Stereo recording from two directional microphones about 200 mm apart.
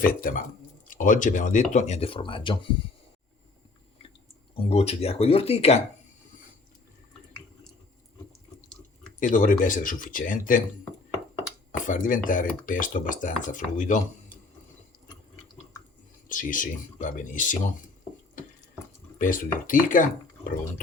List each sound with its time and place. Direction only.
0.0 s speech: 45° left (ahead or behind); by 2.6 s 25° left (ahead or behind)
4.5 s speech: 30° left (ahead or behind)
9.2 s speech: 40° left (ahead or behind)
11.9 s speech: 40° left (ahead or behind)
16.3 s speech: 40° left (ahead or behind)
19.2 s speech: 40° left (ahead or behind)